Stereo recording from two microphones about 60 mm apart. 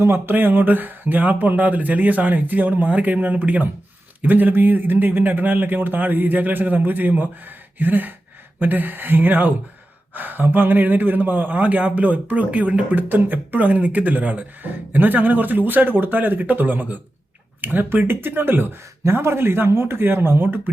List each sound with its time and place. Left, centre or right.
0.0 s speech: right